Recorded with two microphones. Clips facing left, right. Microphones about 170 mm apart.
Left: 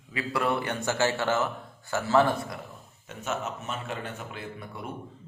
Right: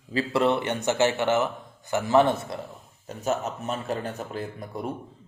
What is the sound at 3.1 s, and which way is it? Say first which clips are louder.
A man's voice: right 5 dB; 35° right (ahead or behind).